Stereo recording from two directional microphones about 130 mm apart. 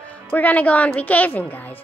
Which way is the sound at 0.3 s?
10° left (ahead or behind).